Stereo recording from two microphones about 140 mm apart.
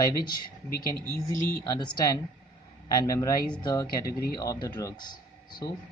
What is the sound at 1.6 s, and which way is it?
Speech, 30° left (ahead or behind).